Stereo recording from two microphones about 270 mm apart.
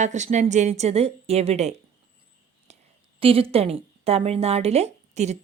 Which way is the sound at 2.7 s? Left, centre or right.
Right.